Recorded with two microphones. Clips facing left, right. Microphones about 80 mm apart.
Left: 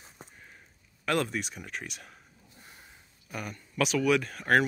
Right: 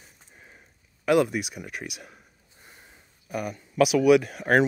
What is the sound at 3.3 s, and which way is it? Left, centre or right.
Speech, centre.